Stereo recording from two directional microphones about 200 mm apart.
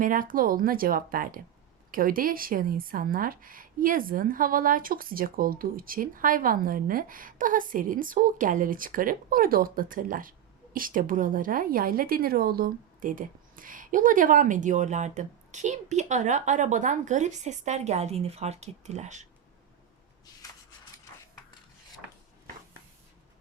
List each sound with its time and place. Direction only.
0.0 s speech: 45° right (ahead or behind)